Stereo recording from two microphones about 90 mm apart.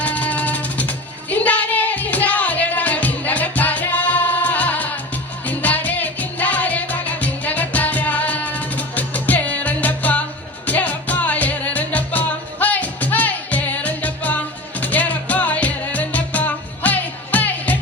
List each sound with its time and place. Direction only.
0.0 s music: 15° left (ahead or behind)